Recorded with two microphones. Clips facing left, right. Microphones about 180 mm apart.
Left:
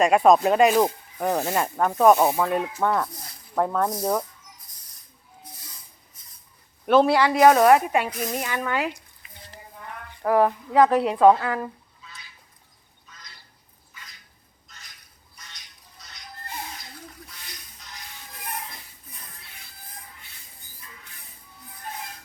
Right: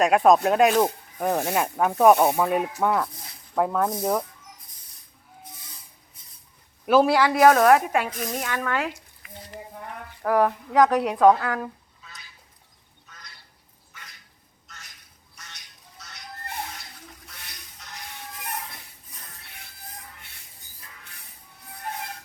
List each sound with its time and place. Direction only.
0.0 s speech: centre (ahead or behind)
6.8 s speech: 5° right (ahead or behind)
10.2 s speech: centre (ahead or behind)
17.2 s a sound: 65° right (ahead or behind)